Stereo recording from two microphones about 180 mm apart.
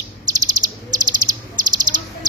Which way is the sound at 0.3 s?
20° right (ahead or behind).